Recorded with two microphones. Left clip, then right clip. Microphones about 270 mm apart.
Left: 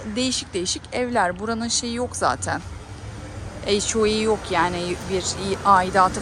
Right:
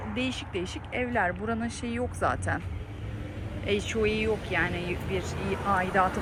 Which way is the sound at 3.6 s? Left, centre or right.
Centre.